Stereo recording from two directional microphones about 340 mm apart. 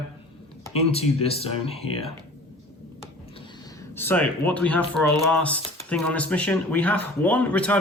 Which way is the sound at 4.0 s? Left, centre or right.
Centre.